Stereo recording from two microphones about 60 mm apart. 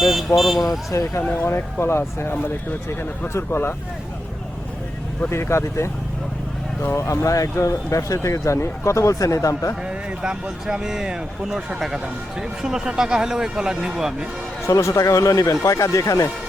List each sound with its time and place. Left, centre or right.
0.0 s vehicle: centre
0.3 s speech: centre
0.6 s speech: left
1.2 s speech: left
3.3 s speech: left
5.3 s speech: left
6.9 s speech: left
10.2 s speech: centre
14.7 s speech: left